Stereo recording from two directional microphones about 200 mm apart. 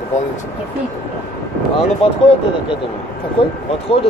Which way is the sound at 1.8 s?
30° left (ahead or behind).